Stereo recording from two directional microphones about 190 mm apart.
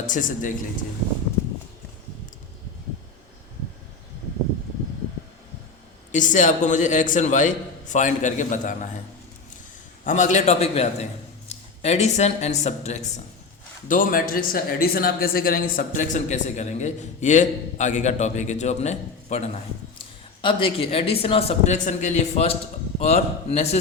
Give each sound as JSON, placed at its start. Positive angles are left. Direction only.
{"t": 0.0, "sound": "a man's voice", "side_deg": 45}
{"t": 6.1, "sound": "a man's voice", "side_deg": 40}
{"t": 10.0, "sound": "a man's voice", "side_deg": 40}